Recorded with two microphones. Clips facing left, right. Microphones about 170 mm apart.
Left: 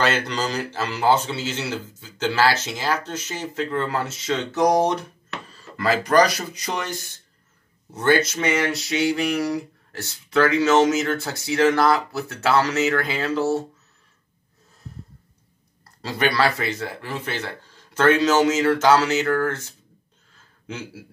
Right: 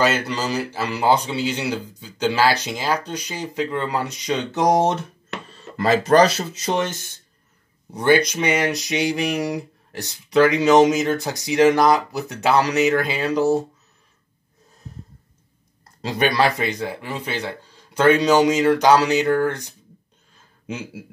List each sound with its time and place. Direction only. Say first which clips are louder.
0.0 s speech: right 2 dB; 10° right (ahead or behind)
16.0 s speech: right 2 dB; 20° right (ahead or behind)